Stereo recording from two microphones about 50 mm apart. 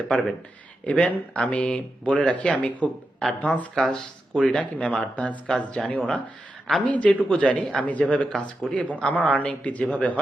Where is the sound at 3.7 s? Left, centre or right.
Centre.